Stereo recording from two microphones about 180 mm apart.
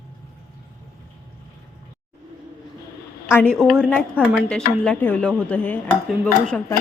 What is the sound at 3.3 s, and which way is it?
A woman's voice, 10° left (ahead or behind).